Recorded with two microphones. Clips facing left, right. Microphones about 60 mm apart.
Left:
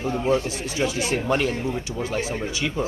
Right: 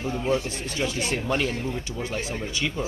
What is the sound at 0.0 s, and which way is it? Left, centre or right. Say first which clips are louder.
Speech: left 3 dB; centre.